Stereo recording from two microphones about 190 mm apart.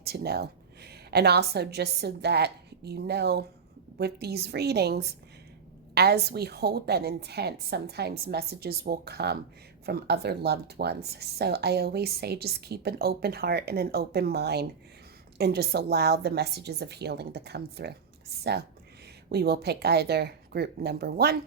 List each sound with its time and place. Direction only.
0.0 s a woman's voice: 55° right (ahead or behind)
19.3 s speech: 55° right (ahead or behind)